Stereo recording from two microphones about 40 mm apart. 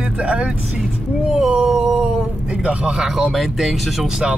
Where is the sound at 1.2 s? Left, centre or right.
Centre.